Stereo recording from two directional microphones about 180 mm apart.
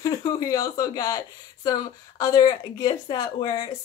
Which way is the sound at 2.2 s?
20° left (ahead or behind).